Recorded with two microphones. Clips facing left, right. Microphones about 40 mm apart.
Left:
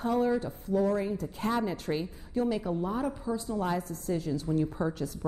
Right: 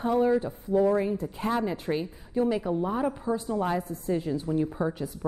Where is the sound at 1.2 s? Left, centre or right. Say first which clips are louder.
Right 2 dB; centre.